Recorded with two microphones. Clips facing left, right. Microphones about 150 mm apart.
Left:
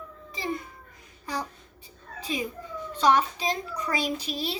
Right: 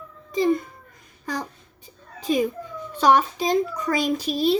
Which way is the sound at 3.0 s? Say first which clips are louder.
Right 4 dB; 50° right (ahead or behind).